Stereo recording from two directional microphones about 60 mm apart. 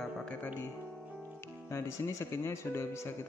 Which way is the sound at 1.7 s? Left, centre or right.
Left.